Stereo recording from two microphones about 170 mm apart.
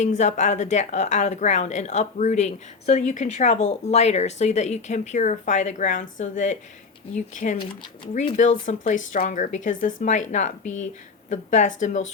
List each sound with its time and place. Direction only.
0.0 s a woman's voice: 45° left (ahead or behind)
7.6 s speech: 30° left (ahead or behind)
8.4 s a woman's voice: 45° left (ahead or behind)